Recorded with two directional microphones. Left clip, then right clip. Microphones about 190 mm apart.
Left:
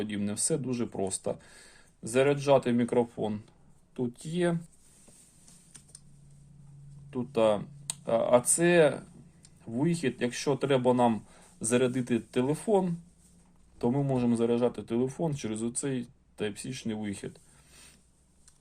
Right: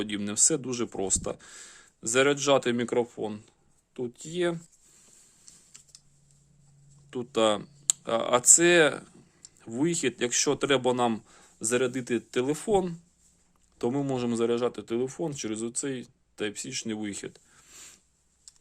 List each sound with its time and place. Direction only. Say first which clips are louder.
0.0 s a man's voice: right 6 dB; 40° right (ahead or behind); by 4.5 s 25° right (ahead or behind)
7.1 s a man's voice: right 1 dB; 40° right (ahead or behind)